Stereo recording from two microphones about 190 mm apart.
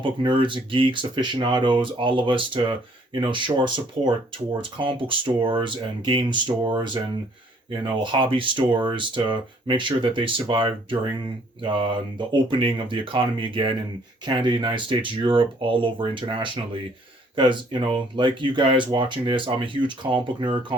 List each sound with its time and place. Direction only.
0.0 s speech: 25° right (ahead or behind)